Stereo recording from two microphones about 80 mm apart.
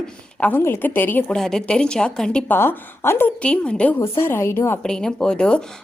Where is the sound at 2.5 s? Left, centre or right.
Left.